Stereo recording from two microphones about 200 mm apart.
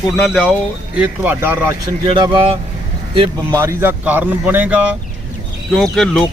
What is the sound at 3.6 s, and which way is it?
Speech, 10° right (ahead or behind).